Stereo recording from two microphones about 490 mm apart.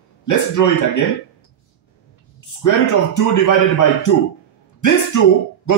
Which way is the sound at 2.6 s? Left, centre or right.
Left.